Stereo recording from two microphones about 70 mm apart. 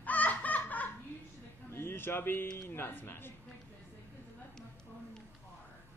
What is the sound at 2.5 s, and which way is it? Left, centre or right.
Speech, left.